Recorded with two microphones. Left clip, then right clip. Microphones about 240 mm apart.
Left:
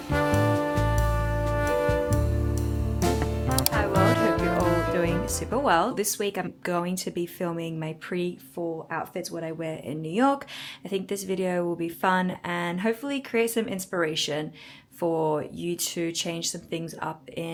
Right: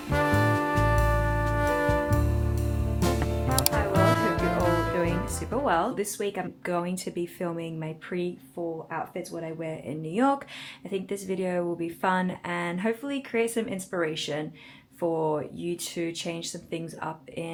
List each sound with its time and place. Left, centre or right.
0.1 s music: centre
5.0 s music: centre
5.9 s speech: centre
8.1 s speech: left
9.6 s speech: left
10.1 s speech: centre
15.0 s speech: left
15.4 s speech: centre